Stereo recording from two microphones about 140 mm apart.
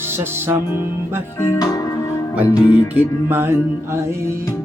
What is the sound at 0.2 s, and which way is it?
Music, 15° right (ahead or behind).